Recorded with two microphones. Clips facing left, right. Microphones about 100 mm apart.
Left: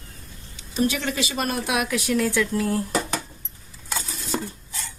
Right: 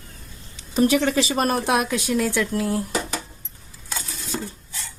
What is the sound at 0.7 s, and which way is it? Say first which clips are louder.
A woman's voice: right 5 dB; 40° right (ahead or behind).